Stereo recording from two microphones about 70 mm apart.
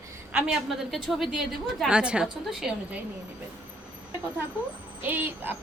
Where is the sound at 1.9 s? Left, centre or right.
Centre.